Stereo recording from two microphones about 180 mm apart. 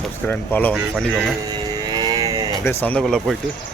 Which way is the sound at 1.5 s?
25° right (ahead or behind).